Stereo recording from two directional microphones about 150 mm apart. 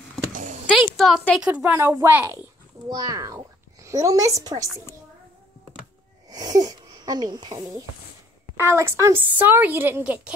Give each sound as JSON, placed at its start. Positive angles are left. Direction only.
{"t": 0.3, "sound": "a sound", "side_deg": -55}
{"t": 0.7, "sound": "a woman's voice", "side_deg": 0}
{"t": 1.5, "sound": "a woman's voice", "side_deg": -10}
{"t": 6.3, "sound": "a woman's voice", "side_deg": -25}